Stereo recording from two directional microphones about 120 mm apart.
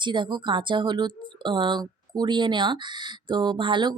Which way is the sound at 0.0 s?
40° right (ahead or behind).